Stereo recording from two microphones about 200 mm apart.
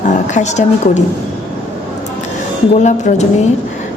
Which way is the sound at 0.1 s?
35° left (ahead or behind).